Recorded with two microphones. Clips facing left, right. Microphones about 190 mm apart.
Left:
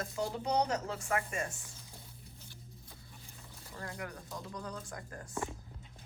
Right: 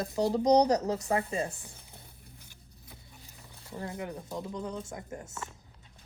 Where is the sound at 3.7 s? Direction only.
20° right (ahead or behind).